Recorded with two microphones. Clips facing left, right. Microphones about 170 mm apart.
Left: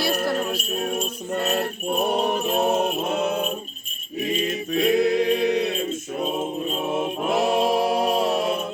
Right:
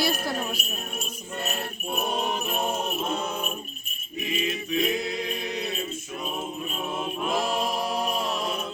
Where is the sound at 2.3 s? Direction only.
70° left (ahead or behind).